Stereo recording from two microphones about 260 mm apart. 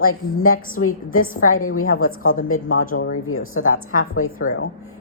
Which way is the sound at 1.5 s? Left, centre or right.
Left.